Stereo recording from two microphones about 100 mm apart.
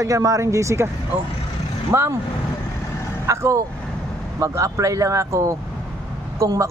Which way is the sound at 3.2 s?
30° right (ahead or behind).